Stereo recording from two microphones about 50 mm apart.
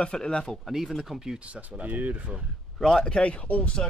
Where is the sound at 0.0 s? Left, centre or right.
Centre.